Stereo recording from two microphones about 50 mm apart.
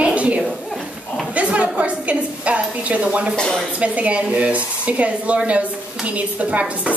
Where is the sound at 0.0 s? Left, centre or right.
Right.